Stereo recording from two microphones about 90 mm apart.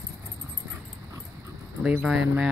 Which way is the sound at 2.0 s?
10° right (ahead or behind).